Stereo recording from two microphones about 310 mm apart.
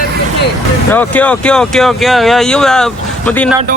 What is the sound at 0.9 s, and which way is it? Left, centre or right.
Speech, centre.